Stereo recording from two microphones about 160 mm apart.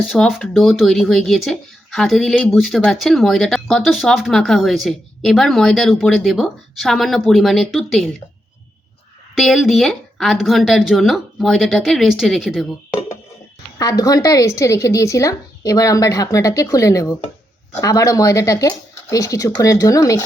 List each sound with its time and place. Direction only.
0.1 s speech: 5° left (ahead or behind)
9.3 s speech: centre (ahead or behind)
13.7 s a woman's voice: 25° left (ahead or behind)